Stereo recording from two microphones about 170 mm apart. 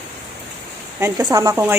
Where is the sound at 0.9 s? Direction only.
20° right (ahead or behind).